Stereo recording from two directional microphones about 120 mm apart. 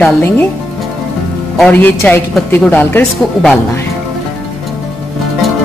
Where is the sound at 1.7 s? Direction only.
15° left (ahead or behind).